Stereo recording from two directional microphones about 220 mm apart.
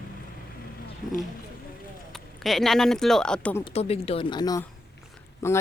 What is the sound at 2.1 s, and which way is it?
Speech, centre (ahead or behind).